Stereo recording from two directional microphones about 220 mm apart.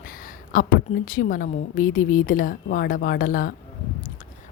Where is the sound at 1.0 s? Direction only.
40° left (ahead or behind).